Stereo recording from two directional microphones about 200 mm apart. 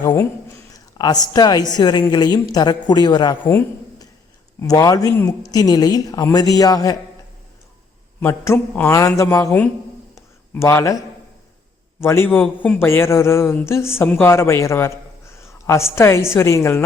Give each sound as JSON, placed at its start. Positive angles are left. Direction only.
{"t": 0.7, "sound": "a woman's voice", "side_deg": 20}
{"t": 3.5, "sound": "a sound", "side_deg": 20}
{"t": 4.6, "sound": "a man's voice", "side_deg": 15}
{"t": 8.2, "sound": "a man's voice", "side_deg": 10}
{"t": 10.2, "sound": "a sound", "side_deg": 15}
{"t": 11.9, "sound": "a man's voice", "side_deg": 10}